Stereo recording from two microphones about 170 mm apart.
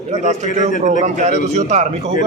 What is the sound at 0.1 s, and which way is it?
Speech, 40° right (ahead or behind).